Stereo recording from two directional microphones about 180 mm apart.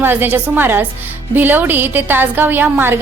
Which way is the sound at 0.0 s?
10° right (ahead or behind).